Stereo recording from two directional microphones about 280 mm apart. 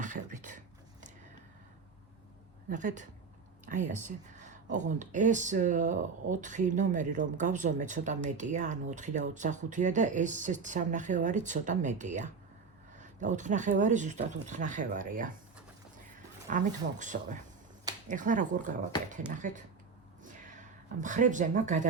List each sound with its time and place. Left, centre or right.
0.0 s a sound: right
2.6 s a woman's voice: right
16.5 s speech: right
21.0 s speech: right